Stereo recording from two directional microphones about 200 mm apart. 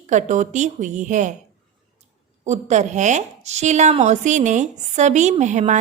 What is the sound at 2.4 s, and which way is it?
A woman's voice, 35° right (ahead or behind).